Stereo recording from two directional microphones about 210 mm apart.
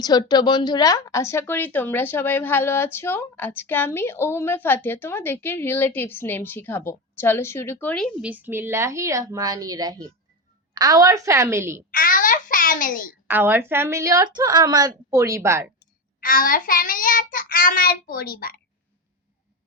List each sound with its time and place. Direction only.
0.0 s a woman's voice: 20° left (ahead or behind); by 8.3 s 5° left (ahead or behind)
8.3 s a woman's voice: 10° right (ahead or behind)
11.9 s babbling: 40° left (ahead or behind)
13.2 s a woman's voice: 10° right (ahead or behind)
16.2 s child singing: 40° left (ahead or behind)